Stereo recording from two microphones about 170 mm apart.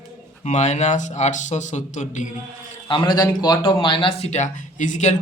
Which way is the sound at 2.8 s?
30° left (ahead or behind).